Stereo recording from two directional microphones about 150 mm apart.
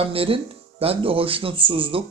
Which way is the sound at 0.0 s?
40° right (ahead or behind).